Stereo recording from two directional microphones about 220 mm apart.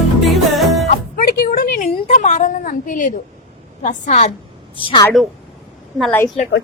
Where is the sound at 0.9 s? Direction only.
40° left (ahead or behind).